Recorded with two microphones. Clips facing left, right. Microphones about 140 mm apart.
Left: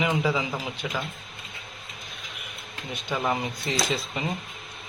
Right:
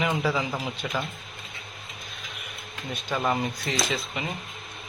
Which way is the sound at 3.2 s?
Centre (ahead or behind).